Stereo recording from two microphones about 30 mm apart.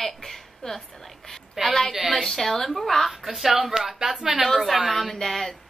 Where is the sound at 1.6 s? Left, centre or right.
Centre.